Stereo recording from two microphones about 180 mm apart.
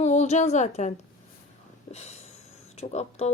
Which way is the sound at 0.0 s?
40° left (ahead or behind).